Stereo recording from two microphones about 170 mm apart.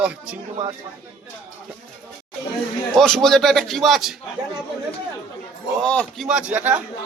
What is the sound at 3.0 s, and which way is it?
Speech, centre (ahead or behind).